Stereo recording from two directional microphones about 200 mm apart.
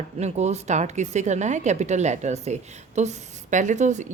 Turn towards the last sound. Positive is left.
turn(degrees=-35)  # may be behind; listen again after turning